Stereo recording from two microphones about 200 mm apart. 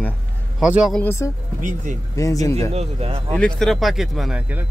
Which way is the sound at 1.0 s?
10° left (ahead or behind).